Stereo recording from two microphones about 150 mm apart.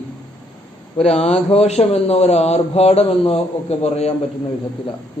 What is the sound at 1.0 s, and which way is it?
Speech, 45° left (ahead or behind).